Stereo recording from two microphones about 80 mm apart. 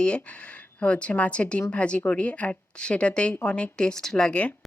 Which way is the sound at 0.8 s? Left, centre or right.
Centre.